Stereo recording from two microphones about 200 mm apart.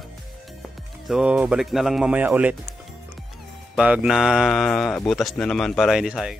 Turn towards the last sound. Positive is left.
turn(degrees=-5)  # may be behind; listen again after turning